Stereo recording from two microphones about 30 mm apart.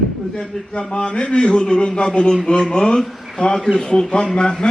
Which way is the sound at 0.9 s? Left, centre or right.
Left.